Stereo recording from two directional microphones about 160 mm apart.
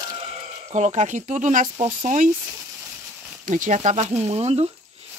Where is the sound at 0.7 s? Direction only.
45° right (ahead or behind).